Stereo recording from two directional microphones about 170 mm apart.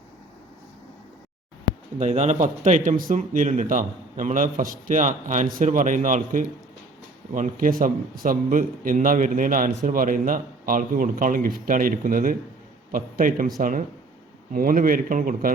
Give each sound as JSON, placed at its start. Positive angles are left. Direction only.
{"t": 2.0, "sound": "a man's voice", "side_deg": -45}